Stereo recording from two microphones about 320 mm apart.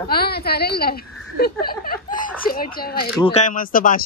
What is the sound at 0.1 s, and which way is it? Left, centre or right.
A woman's voice, left.